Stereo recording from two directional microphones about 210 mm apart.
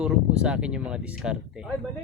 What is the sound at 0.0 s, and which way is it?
Speech, 5° right (ahead or behind).